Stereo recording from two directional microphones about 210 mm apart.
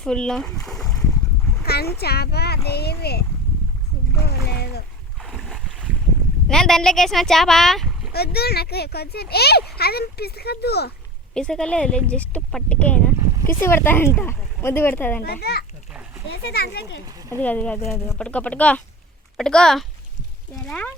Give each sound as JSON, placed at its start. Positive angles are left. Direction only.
{"t": 0.0, "sound": "speech", "side_deg": 5}
{"t": 1.6, "sound": "speech", "side_deg": 50}
{"t": 5.2, "sound": "boat", "side_deg": 0}
{"t": 6.5, "sound": "speech", "side_deg": 0}
{"t": 8.1, "sound": "speech", "side_deg": 50}
{"t": 11.3, "sound": "speech", "side_deg": 5}
{"t": 15.2, "sound": "speech", "side_deg": 50}
{"t": 15.9, "sound": "a sound", "side_deg": -5}
{"t": 16.3, "sound": "speech", "side_deg": 50}
{"t": 17.4, "sound": "speech", "side_deg": 5}